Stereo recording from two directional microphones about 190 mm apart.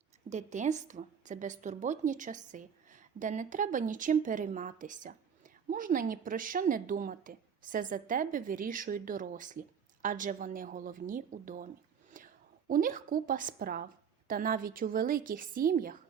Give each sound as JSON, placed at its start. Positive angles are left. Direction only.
{"t": 0.3, "sound": "a woman's voice", "side_deg": -40}